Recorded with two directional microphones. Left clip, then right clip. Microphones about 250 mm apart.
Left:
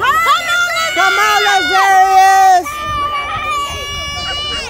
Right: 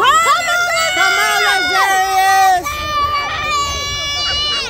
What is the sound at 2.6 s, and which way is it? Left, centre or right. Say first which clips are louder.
Baby cry: right 1 dB; centre.